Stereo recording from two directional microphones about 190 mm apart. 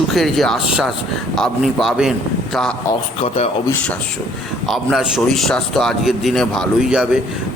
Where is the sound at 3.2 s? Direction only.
30° left (ahead or behind).